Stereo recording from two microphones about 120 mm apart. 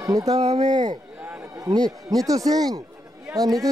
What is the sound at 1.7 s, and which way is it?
Speech, 5° left (ahead or behind).